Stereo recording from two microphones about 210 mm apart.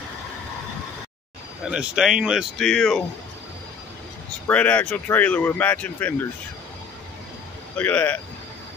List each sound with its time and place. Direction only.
1.7 s speech: 5° right (ahead or behind)
4.5 s speech: 5° left (ahead or behind)
7.7 s speech: 10° left (ahead or behind)